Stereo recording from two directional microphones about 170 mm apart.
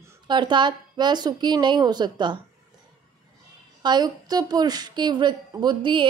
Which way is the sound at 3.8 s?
25° right (ahead or behind).